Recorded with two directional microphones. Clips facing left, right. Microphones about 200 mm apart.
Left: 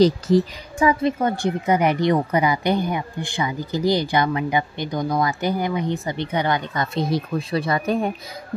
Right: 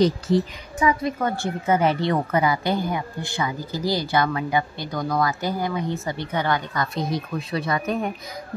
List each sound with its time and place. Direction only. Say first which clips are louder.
0.0 s speech: left 3 dB; 30° left (ahead or behind)